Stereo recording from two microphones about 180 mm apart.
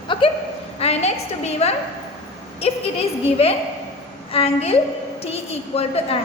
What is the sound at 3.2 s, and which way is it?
A woman's voice, 35° left (ahead or behind).